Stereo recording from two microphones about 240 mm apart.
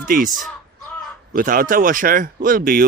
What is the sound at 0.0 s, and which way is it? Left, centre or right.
Speech, right.